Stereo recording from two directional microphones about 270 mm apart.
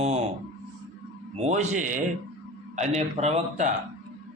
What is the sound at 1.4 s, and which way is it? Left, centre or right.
A man's voice, right.